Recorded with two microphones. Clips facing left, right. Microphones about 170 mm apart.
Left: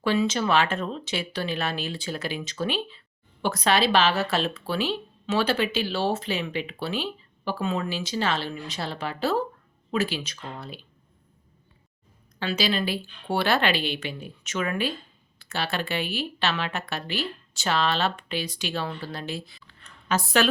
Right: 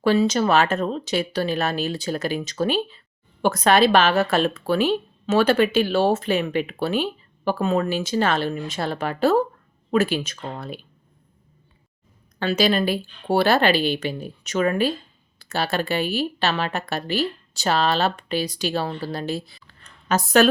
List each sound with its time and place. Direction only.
0.0 s a woman's voice: 40° right (ahead or behind)
12.4 s a woman's voice: 50° right (ahead or behind)